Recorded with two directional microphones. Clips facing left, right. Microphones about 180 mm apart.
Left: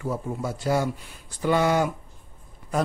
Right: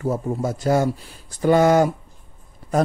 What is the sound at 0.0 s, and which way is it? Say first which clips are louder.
Speech: right 6 dB; 45° right (ahead or behind).